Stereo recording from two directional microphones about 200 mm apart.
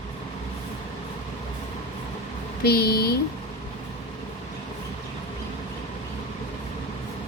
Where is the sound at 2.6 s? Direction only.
50° left (ahead or behind).